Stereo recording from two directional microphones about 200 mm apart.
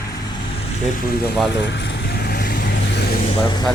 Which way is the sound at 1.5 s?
60° left (ahead or behind).